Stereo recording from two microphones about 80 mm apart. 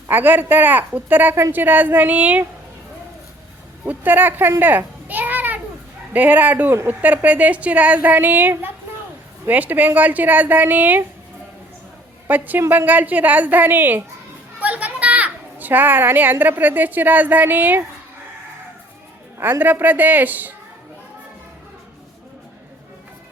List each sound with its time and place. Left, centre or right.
0.1 s a woman's voice: right
3.8 s a woman's voice: right
4.6 s children playing: right
6.1 s a woman's voice: right
12.3 s a woman's voice: right
19.4 s a woman's voice: right